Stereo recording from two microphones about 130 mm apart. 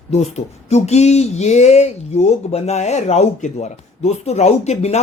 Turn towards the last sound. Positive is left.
turn(degrees=55)  # may be behind; listen again after turning